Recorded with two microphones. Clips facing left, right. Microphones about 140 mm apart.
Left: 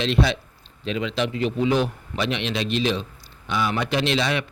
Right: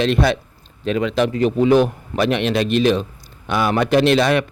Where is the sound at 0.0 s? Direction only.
50° right (ahead or behind).